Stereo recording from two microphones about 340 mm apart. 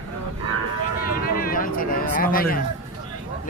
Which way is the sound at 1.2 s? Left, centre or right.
Left.